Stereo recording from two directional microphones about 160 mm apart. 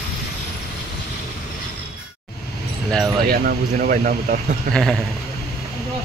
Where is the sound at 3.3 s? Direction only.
65° right (ahead or behind).